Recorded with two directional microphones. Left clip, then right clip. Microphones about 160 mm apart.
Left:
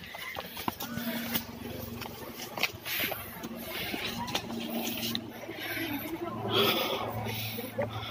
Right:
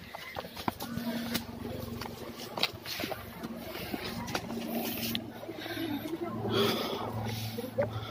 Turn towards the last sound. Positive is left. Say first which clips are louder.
# left 3 dB
turn(degrees=-30)  # may be behind; listen again after turning